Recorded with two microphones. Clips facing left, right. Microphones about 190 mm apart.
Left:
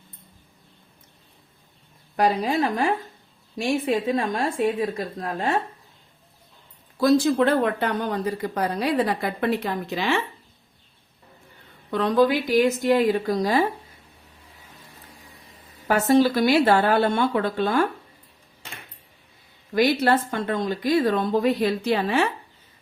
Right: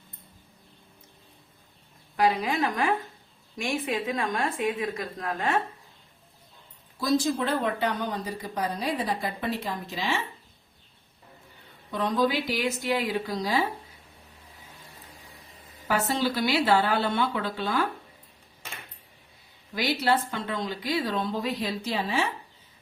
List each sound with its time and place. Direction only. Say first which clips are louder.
2.1 s a woman's voice: left 3 dB; 40° left (ahead or behind)
7.0 s speech: left 7 dB; 65° left (ahead or behind)
11.9 s speech: left 6 dB; 65° left (ahead or behind)
15.9 s speech: left 8 dB; 50° left (ahead or behind)
19.7 s speech: left 6 dB; 55° left (ahead or behind)